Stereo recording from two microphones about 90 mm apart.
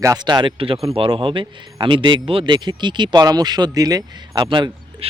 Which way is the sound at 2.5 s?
55° right (ahead or behind).